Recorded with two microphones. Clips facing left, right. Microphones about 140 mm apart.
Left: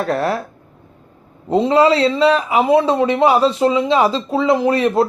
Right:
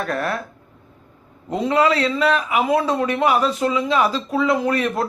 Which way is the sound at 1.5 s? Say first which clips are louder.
Left 5 dB; 30° left (ahead or behind).